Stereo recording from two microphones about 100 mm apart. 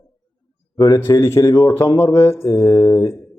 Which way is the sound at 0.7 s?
40° left (ahead or behind).